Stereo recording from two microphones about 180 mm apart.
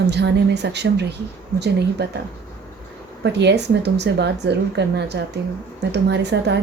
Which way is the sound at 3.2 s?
70° right (ahead or behind).